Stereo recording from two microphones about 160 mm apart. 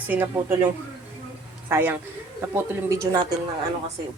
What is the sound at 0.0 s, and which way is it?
Speech, 10° right (ahead or behind).